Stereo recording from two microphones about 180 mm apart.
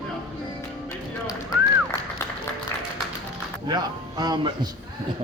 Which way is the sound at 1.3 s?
20° left (ahead or behind).